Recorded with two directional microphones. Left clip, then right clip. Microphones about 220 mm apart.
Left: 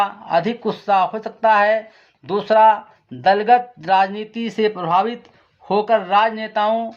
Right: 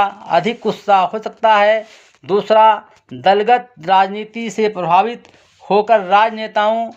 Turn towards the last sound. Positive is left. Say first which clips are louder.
# right 3 dB
turn(degrees=-35)  # may be behind; listen again after turning